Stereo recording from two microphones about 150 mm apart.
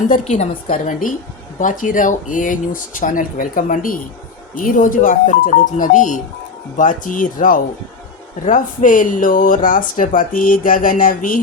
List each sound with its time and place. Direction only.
0.1 s speech: 55° left (ahead or behind)